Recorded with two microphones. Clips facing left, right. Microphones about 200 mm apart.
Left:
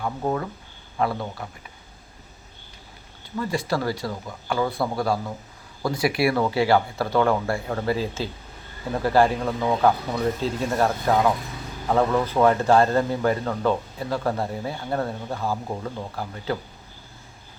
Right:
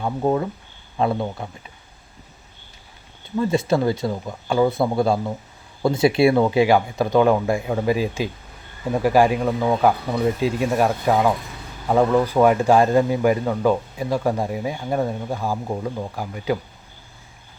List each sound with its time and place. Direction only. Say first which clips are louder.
0.0 s speech: right 5 dB; 20° right (ahead or behind)
3.3 s a man's voice: right 6 dB; 20° right (ahead or behind)